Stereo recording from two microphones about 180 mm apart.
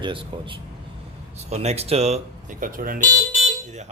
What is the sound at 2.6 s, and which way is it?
Speech, 50° right (ahead or behind).